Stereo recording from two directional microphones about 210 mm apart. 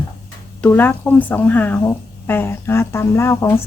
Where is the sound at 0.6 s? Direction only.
10° left (ahead or behind).